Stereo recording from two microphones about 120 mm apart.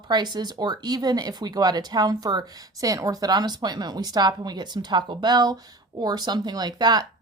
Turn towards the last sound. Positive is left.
turn(degrees=-35)  # may be behind; listen again after turning